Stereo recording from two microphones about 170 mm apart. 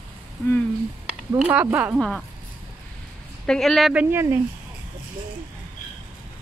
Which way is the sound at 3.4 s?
5° left (ahead or behind).